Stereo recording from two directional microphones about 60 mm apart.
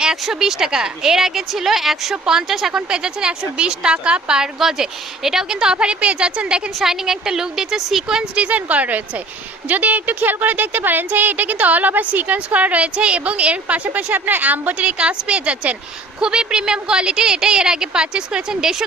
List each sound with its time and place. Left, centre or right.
0.0 s a woman's voice: centre
8.4 s a woman's voice: right